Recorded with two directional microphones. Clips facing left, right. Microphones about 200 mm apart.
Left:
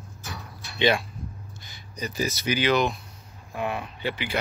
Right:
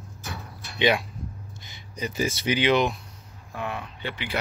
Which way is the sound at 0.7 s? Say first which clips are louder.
Even; 15° right (ahead or behind).